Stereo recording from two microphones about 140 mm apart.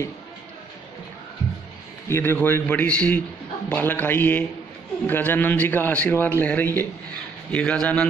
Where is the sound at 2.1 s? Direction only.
15° left (ahead or behind).